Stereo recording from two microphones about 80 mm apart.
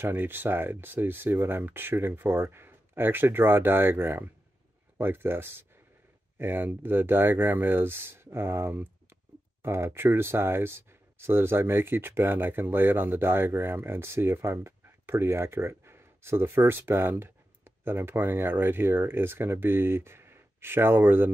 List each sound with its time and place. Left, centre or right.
0.0 s speech: right